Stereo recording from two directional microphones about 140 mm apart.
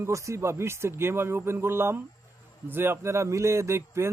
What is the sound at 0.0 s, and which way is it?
Speech, 20° right (ahead or behind).